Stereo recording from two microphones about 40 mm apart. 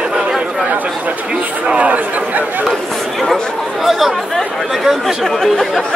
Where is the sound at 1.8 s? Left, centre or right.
Right.